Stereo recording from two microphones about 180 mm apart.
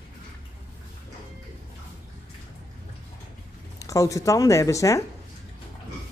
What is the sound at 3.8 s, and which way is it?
Speech, 20° left (ahead or behind).